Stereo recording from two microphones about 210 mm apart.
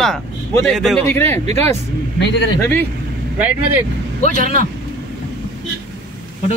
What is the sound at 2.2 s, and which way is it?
Speech, 55° left (ahead or behind).